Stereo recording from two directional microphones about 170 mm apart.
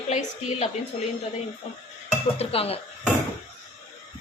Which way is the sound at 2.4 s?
35° left (ahead or behind).